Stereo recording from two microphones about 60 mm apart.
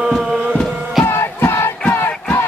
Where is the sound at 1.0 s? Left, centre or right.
Left.